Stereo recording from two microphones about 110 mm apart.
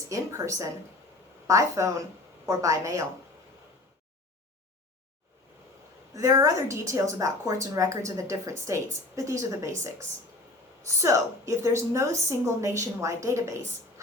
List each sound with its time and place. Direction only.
0.1 s a woman's voice: 30° right (ahead or behind)
6.1 s a woman's voice: 30° right (ahead or behind)